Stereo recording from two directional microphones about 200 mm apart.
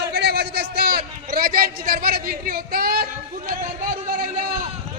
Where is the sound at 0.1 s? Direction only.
55° right (ahead or behind).